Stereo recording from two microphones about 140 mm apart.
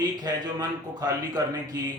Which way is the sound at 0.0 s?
30° right (ahead or behind).